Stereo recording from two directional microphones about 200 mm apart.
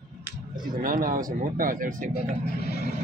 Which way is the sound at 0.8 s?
45° right (ahead or behind).